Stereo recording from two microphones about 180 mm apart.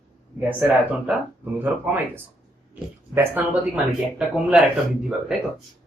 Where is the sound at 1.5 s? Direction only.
10° right (ahead or behind).